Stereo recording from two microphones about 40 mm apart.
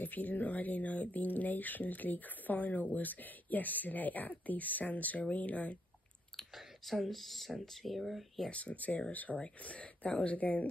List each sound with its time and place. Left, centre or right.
0.0 s speech: left
6.5 s speech: centre
8.5 s speech: left